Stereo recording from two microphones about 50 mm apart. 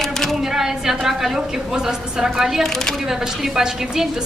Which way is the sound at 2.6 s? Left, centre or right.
Centre.